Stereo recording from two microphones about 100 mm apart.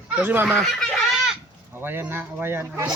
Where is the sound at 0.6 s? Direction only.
Centre (ahead or behind).